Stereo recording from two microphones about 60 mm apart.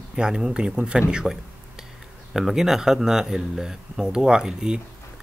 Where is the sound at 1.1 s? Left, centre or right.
Centre.